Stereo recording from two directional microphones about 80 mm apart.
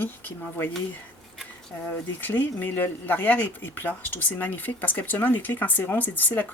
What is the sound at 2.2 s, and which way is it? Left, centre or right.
Speech, left.